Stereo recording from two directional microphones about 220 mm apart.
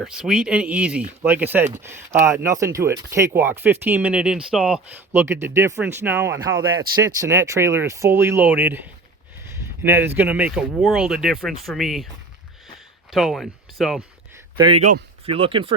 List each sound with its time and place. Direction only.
0.0 s speech: 5° right (ahead or behind)
13.1 s speech: centre (ahead or behind)
14.6 s speech: 25° right (ahead or behind)